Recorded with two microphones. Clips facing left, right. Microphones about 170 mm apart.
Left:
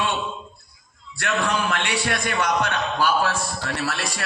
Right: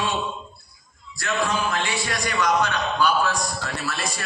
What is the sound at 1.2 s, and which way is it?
Speech, 70° left (ahead or behind).